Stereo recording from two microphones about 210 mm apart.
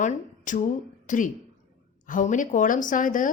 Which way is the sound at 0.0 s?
35° left (ahead or behind).